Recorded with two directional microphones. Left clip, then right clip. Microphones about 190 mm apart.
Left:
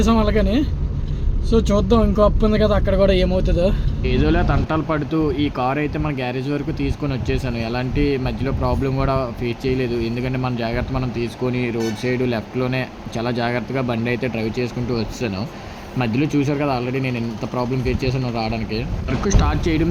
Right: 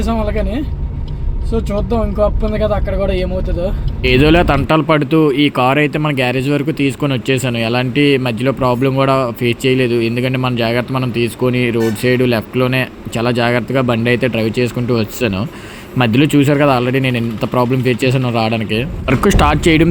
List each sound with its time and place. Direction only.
1.5 s speech: 15° right (ahead or behind)
4.0 s speech: 15° right (ahead or behind)